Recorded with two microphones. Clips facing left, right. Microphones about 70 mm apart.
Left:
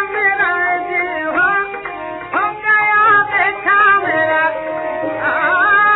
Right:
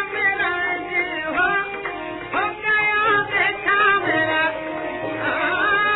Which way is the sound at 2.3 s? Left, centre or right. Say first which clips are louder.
Left 6 dB; left.